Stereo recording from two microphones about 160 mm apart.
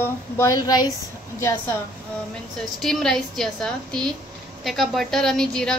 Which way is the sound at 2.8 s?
5° left (ahead or behind).